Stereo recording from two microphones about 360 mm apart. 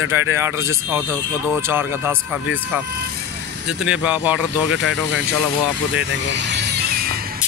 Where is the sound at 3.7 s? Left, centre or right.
Centre.